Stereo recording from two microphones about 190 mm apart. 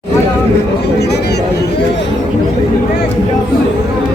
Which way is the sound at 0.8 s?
60° left (ahead or behind).